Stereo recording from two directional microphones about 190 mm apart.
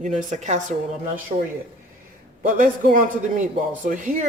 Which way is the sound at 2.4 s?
45° right (ahead or behind).